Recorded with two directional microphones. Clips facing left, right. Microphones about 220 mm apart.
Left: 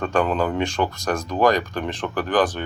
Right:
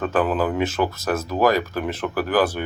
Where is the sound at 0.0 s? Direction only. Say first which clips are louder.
Even; 5° right (ahead or behind).